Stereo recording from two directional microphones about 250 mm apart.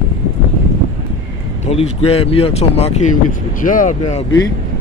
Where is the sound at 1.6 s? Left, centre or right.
Left.